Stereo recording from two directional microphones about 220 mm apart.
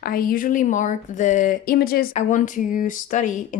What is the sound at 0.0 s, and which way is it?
Speech, 40° left (ahead or behind).